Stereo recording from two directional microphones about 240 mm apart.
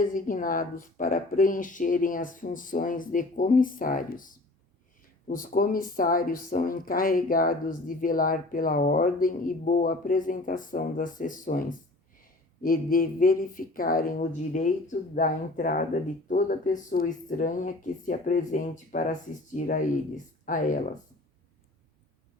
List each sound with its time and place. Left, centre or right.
0.0 s speech: left
5.3 s speech: left